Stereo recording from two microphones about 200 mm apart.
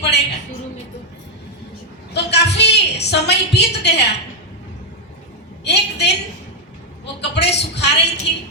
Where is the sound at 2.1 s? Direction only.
55° left (ahead or behind).